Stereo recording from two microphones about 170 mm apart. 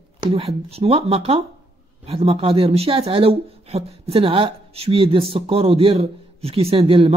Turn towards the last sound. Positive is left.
turn(degrees=-30)  # may be behind; listen again after turning